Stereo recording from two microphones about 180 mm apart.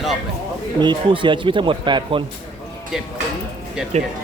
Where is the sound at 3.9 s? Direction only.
40° right (ahead or behind).